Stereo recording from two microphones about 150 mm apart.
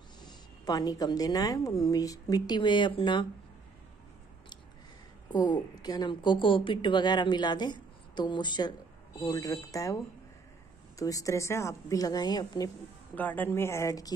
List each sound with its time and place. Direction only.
0.2 s a woman's voice: 25° left (ahead or behind)
5.3 s a woman's voice: 30° left (ahead or behind)
13.1 s speech: 10° left (ahead or behind)